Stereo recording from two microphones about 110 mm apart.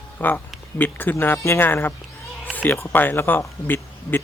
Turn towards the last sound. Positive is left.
turn(degrees=20)  # may be behind; listen again after turning